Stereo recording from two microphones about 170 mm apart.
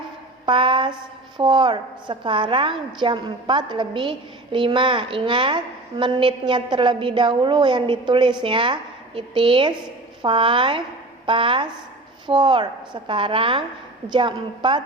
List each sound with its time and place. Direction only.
0.4 s a woman's voice: 30° right (ahead or behind)